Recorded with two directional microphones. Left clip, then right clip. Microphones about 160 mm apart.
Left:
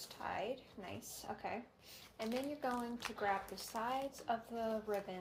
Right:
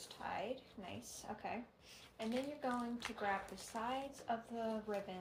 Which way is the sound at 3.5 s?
30° left (ahead or behind).